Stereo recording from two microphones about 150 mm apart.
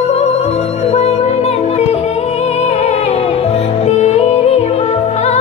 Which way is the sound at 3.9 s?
45° left (ahead or behind).